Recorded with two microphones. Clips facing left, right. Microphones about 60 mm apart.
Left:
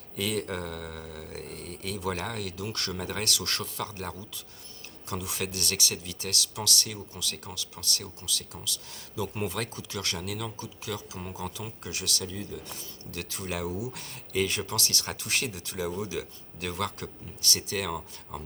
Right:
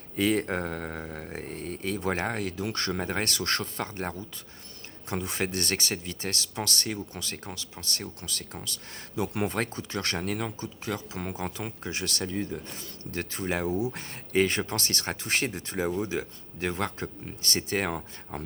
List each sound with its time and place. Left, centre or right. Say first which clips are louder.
0.2 s speech: right 5 dB; right